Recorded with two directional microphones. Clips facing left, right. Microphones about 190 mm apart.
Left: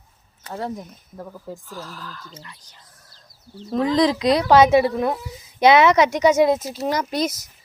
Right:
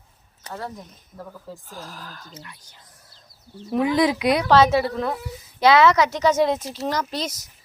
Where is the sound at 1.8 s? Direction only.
45° right (ahead or behind).